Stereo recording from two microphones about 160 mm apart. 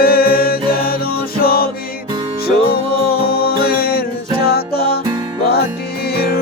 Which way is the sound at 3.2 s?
70° left (ahead or behind).